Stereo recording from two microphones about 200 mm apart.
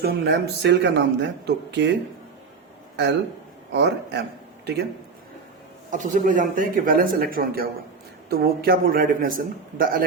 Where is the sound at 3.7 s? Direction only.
60° right (ahead or behind).